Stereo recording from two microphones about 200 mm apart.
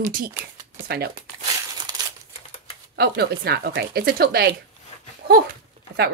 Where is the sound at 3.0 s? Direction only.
55° right (ahead or behind).